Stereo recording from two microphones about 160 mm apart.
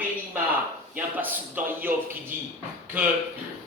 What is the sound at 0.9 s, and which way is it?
Speech, 10° right (ahead or behind).